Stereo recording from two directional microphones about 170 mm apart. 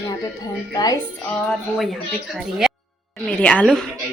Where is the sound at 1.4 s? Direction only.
Centre (ahead or behind).